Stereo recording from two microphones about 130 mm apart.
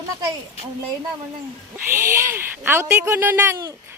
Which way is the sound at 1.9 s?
20° right (ahead or behind).